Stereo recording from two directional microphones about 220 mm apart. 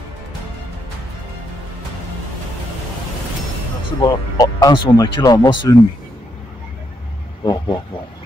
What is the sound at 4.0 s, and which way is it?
Speech, 15° left (ahead or behind).